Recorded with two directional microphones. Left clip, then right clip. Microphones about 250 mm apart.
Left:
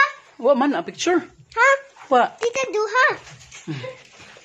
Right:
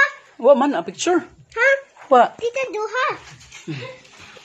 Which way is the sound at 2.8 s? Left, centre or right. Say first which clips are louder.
Left 6 dB; left.